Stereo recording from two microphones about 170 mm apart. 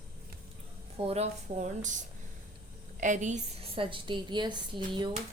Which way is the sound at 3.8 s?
30° right (ahead or behind).